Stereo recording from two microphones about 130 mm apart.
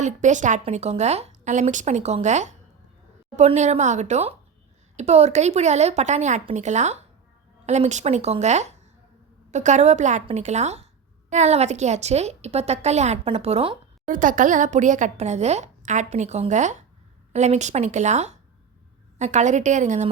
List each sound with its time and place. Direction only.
0.0 s a woman's voice: 70° right (ahead or behind)
0.6 s a woman's voice: 55° right (ahead or behind)
14.1 s a woman's voice: 90° right; by 20.1 s 70° right (ahead or behind)